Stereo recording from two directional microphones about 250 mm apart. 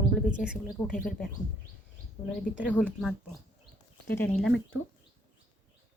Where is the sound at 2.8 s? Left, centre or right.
Centre.